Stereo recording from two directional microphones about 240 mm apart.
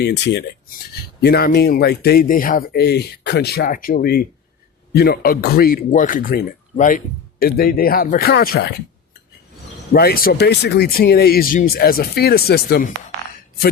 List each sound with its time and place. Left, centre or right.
0.0 s speech: left
9.9 s speech: left